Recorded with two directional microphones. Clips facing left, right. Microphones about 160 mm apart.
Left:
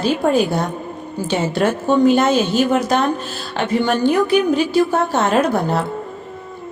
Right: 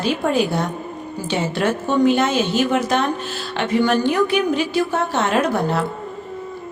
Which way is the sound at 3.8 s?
40° left (ahead or behind).